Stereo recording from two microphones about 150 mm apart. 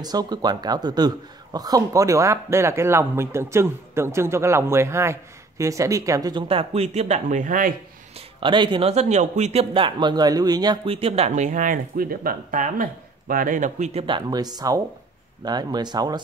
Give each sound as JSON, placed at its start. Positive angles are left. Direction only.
{"t": 0.0, "sound": "speech", "side_deg": -25}
{"t": 6.4, "sound": "speech", "side_deg": -40}
{"t": 8.4, "sound": "speech", "side_deg": -35}
{"t": 14.0, "sound": "speech", "side_deg": -30}